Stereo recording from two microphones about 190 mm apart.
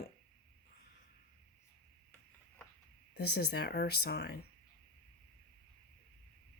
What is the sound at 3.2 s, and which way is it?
Speech, 55° left (ahead or behind).